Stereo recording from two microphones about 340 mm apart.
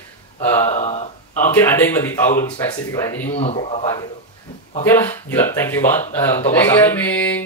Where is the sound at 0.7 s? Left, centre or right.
Centre.